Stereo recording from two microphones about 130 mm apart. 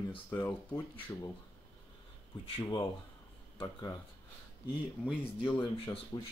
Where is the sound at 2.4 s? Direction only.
40° left (ahead or behind).